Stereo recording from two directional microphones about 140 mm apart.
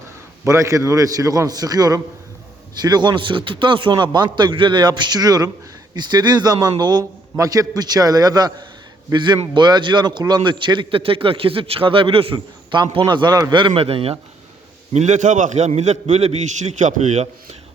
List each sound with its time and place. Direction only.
0.4 s a man's voice: 20° right (ahead or behind); by 14.2 s 45° right (ahead or behind)
14.9 s a man's voice: 55° right (ahead or behind)